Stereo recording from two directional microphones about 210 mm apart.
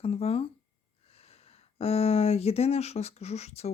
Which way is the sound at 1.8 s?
30° left (ahead or behind).